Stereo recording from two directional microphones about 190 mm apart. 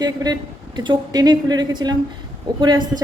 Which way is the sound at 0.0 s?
20° right (ahead or behind).